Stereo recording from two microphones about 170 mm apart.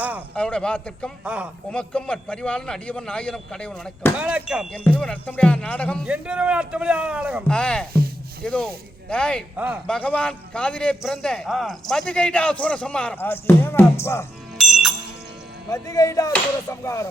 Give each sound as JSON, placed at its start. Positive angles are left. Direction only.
{"t": 0.3, "sound": "a man's voice", "side_deg": 5}
{"t": 1.2, "sound": "a man's voice", "side_deg": -5}
{"t": 1.7, "sound": "a man's voice", "side_deg": 5}
{"t": 4.2, "sound": "a man's voice", "side_deg": -10}
{"t": 4.7, "sound": "music", "side_deg": 5}
{"t": 6.1, "sound": "a man's voice", "side_deg": -5}
{"t": 7.4, "sound": "a man's voice", "side_deg": 5}
{"t": 7.9, "sound": "a sound", "side_deg": -65}
{"t": 8.4, "sound": "a man's voice", "side_deg": 5}
{"t": 9.6, "sound": "a man's voice", "side_deg": -10}
{"t": 9.8, "sound": "a man's voice", "side_deg": 5}
{"t": 14.6, "sound": "music", "side_deg": 0}
{"t": 15.7, "sound": "speech", "side_deg": 20}
{"t": 16.3, "sound": "music", "side_deg": 20}